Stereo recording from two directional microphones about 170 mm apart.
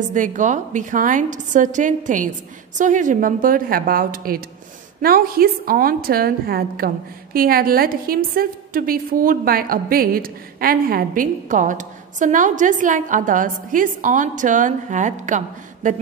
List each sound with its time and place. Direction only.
0.1 s a woman's voice: 50° right (ahead or behind)